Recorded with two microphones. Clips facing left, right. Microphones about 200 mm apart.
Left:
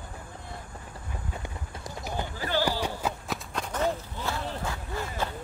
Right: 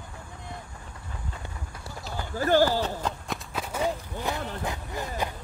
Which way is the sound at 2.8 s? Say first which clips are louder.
Even; 5° left (ahead or behind).